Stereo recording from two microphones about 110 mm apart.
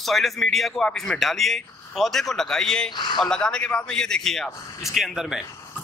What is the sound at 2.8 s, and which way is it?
Speech, 45° left (ahead or behind).